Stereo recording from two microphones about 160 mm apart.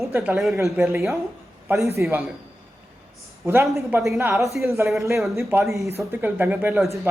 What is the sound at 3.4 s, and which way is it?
Speech, 15° right (ahead or behind).